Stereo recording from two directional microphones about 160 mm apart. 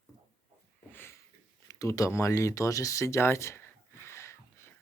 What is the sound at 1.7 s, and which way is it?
Speech, 20° left (ahead or behind).